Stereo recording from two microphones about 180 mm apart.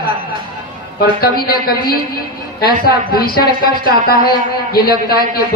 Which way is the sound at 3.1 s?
55° left (ahead or behind).